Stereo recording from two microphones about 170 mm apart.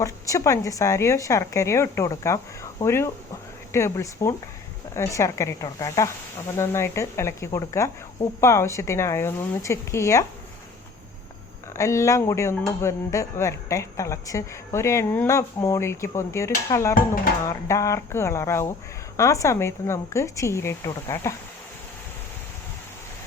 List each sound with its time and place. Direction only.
0.0 s speech: 20° left (ahead or behind)
11.8 s speech: 15° left (ahead or behind)